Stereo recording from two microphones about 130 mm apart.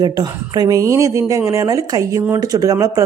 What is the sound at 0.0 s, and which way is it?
Speech, 30° right (ahead or behind).